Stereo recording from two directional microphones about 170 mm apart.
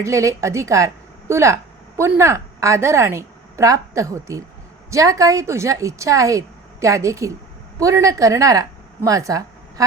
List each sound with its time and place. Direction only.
0.0 s a woman's voice: 20° right (ahead or behind)